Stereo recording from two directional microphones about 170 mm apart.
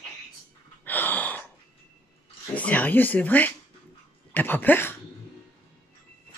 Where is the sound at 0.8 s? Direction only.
10° left (ahead or behind).